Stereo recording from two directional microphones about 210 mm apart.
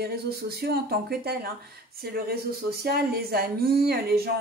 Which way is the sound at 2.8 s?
45° right (ahead or behind).